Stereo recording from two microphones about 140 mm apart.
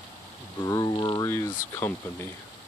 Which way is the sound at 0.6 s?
30° left (ahead or behind).